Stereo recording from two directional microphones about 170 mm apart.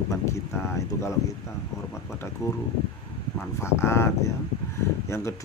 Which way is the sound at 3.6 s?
15° left (ahead or behind).